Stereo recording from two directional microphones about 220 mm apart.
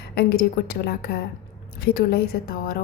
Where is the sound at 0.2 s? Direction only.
45° left (ahead or behind).